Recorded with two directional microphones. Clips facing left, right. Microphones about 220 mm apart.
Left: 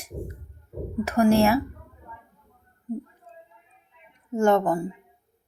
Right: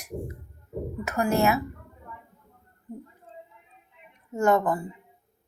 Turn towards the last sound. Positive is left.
turn(degrees=25)  # may be behind; listen again after turning